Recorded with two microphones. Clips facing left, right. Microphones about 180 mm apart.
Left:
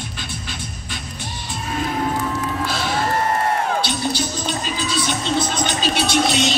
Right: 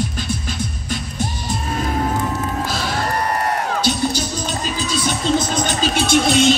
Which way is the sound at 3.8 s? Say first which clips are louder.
Right 3 dB; 45° right (ahead or behind).